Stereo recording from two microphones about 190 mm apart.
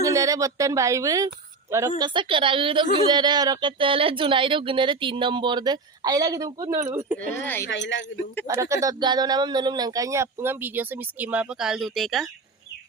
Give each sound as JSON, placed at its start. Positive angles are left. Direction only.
{"t": 0.0, "sound": "speech", "side_deg": -15}
{"t": 7.4, "sound": "speech", "side_deg": 10}
{"t": 7.7, "sound": "speech", "side_deg": 75}
{"t": 8.7, "sound": "speech", "side_deg": -20}